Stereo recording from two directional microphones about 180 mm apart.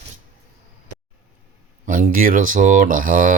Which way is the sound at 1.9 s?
50° right (ahead or behind).